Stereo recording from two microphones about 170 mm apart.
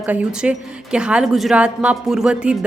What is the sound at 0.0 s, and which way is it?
A woman's voice, 10° right (ahead or behind).